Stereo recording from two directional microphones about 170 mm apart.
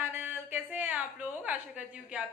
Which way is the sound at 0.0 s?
10° right (ahead or behind).